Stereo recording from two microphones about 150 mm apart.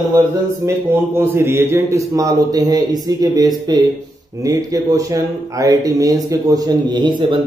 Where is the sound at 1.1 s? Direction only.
15° right (ahead or behind).